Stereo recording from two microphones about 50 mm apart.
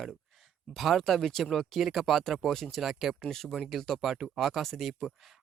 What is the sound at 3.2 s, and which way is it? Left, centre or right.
Speech, centre.